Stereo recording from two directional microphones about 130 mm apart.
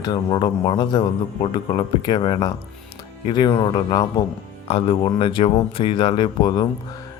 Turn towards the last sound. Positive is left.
turn(degrees=35)  # may be behind; listen again after turning